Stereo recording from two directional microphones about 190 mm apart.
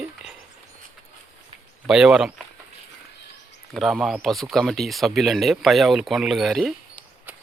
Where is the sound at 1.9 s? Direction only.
5° right (ahead or behind).